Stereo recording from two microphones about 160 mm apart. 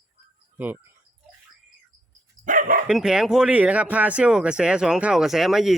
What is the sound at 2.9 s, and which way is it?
Speech, 5° right (ahead or behind).